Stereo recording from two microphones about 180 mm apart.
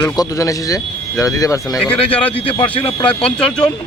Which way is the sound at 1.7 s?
10° left (ahead or behind).